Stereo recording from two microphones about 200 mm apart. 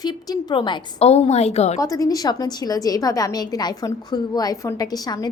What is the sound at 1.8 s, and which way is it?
A woman's voice, 15° left (ahead or behind).